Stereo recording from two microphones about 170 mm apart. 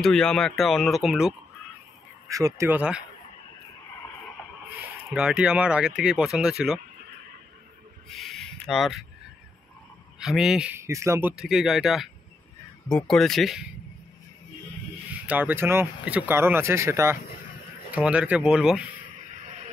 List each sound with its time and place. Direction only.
0.0 s speech: 5° left (ahead or behind)
2.2 s speech: 20° right (ahead or behind)
5.1 s speech: 5° right (ahead or behind)
8.1 s a sound: centre (ahead or behind)
10.1 s speech: 5° right (ahead or behind)
10.8 s speech: 15° right (ahead or behind); by 13.7 s centre (ahead or behind)
15.2 s speech: 10° right (ahead or behind)